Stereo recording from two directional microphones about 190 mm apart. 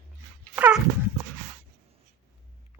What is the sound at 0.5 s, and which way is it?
Dog, 10° right (ahead or behind).